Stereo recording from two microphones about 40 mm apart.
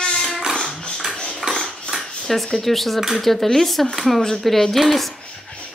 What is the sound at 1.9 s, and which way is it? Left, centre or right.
Cutlery, centre.